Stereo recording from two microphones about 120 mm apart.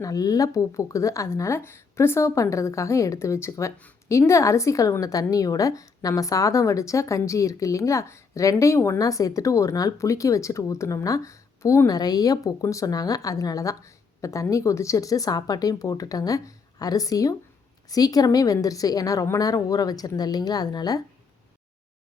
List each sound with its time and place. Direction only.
0.0 s a woman's voice: 30° left (ahead or behind)